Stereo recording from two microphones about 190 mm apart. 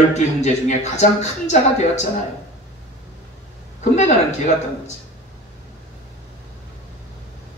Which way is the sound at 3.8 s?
35° left (ahead or behind).